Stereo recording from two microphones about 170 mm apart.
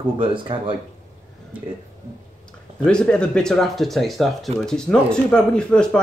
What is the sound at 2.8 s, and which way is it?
Speech, 5° left (ahead or behind).